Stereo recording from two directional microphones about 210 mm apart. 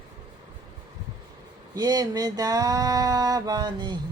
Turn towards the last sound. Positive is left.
turn(degrees=-20)  # may be behind; listen again after turning